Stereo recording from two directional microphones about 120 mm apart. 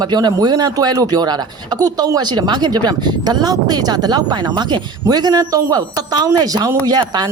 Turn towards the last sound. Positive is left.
turn(degrees=-35)  # may be behind; listen again after turning